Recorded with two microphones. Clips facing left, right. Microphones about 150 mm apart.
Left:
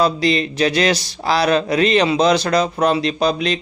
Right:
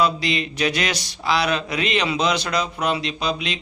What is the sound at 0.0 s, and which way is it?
Speech, 35° left (ahead or behind).